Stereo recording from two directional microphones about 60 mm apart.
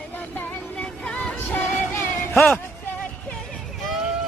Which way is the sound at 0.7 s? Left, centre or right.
Centre.